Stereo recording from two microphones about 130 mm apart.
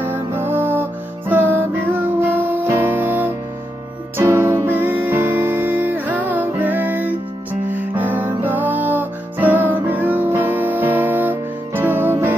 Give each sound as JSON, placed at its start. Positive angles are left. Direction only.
{"t": 0.0, "sound": "music", "side_deg": -15}